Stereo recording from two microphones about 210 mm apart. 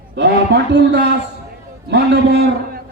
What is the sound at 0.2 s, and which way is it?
Speech, 55° right (ahead or behind).